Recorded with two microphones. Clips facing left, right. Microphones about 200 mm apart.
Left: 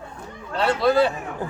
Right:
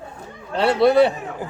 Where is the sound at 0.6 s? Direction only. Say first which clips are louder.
Right 4 dB; 25° right (ahead or behind).